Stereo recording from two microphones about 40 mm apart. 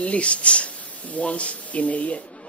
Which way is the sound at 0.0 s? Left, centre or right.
Left.